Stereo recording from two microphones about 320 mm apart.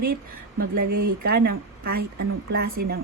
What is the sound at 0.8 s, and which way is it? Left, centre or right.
Speech, right.